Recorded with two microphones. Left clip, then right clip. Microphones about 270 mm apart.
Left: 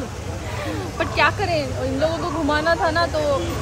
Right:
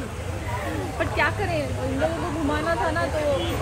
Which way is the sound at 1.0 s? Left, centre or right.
Centre.